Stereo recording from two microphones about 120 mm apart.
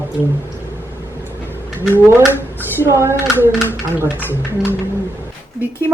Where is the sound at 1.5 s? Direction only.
20° right (ahead or behind).